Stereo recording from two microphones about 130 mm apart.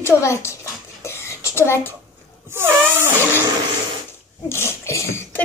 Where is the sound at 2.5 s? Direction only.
15° right (ahead or behind).